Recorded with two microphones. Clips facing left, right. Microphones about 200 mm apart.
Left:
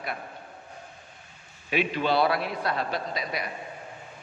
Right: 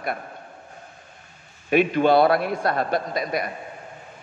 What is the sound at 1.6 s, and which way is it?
A man's voice, 50° right (ahead or behind).